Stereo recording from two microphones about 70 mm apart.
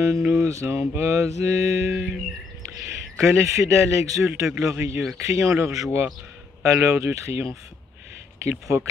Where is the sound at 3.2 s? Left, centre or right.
Right.